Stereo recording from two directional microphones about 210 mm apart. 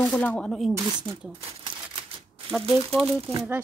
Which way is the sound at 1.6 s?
25° right (ahead or behind).